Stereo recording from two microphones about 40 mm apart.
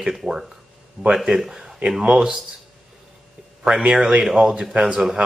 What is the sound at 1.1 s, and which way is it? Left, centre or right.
Speech, centre.